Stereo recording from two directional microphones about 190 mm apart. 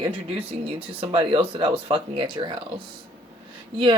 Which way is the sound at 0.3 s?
30° right (ahead or behind).